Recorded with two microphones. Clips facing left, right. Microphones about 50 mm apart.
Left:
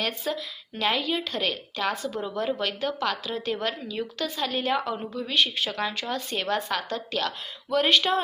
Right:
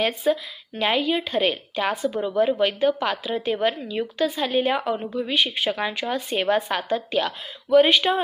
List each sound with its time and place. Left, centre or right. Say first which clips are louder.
0.0 s a woman's voice: right 7 dB; centre